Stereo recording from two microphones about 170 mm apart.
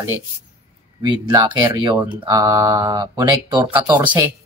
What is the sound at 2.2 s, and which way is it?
Mantra, 20° right (ahead or behind).